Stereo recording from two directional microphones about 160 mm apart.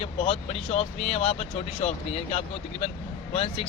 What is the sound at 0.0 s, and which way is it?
Speech, 40° left (ahead or behind).